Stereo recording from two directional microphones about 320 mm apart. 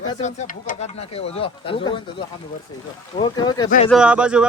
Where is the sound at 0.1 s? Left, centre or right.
Left.